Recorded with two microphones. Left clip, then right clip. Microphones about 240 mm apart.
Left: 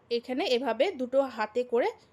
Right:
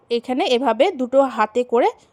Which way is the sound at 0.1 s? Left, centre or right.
Right.